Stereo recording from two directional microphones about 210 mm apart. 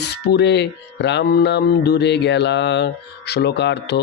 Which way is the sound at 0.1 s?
50° left (ahead or behind).